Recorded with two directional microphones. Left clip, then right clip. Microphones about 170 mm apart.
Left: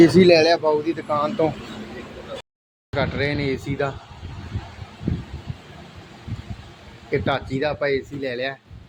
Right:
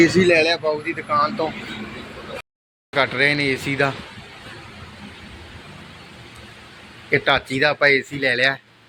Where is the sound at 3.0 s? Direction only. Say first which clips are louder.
Right 6 dB; 10° left (ahead or behind).